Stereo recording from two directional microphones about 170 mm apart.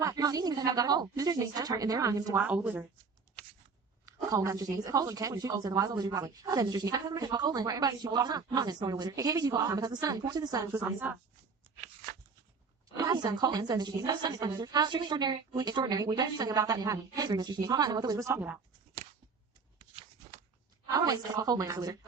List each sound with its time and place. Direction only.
0.0 s a woman's voice: 20° right (ahead or behind)
4.0 s a woman's voice: 20° right (ahead or behind)
13.0 s a woman's voice: 20° right (ahead or behind)
20.8 s a woman's voice: 20° right (ahead or behind)